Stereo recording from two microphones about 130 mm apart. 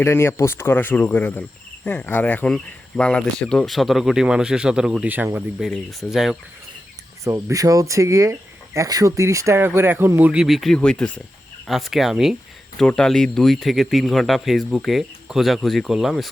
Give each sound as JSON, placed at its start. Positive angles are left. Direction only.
{"t": 0.0, "sound": "cricket", "side_deg": 20}
{"t": 5.5, "sound": "speech", "side_deg": 0}
{"t": 7.3, "sound": "speech", "side_deg": -20}
{"t": 10.4, "sound": "speech", "side_deg": 0}